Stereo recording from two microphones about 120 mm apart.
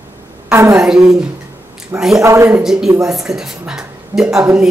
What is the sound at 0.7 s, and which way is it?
A woman's voice, 5° right (ahead or behind).